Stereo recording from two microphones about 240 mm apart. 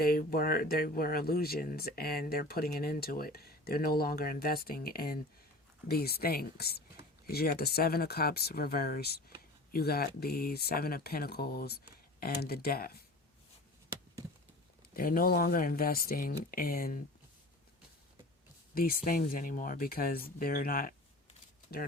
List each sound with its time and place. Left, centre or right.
0.0 s speech: left
14.9 s speech: left
18.7 s speech: left